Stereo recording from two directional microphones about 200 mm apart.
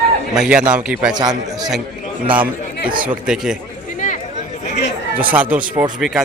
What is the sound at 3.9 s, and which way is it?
Chatter, 40° left (ahead or behind).